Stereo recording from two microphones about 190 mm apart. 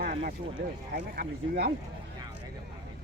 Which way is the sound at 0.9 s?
60° right (ahead or behind).